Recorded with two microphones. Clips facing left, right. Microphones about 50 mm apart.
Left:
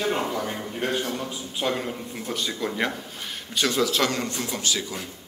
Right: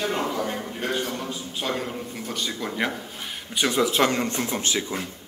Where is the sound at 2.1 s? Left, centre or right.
Centre.